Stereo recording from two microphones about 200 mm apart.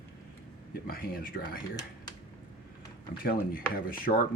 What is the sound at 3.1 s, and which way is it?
Speech, 45° left (ahead or behind).